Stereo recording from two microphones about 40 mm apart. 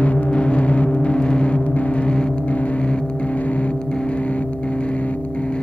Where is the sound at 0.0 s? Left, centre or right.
Left.